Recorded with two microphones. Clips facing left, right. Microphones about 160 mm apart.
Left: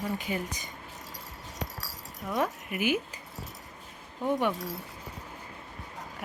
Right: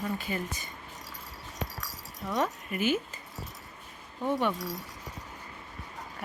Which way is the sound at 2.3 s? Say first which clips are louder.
Even; 10° left (ahead or behind).